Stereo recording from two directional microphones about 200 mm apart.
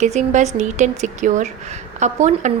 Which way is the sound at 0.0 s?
35° right (ahead or behind).